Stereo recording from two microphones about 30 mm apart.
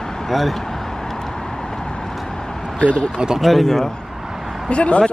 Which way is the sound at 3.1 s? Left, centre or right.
Right.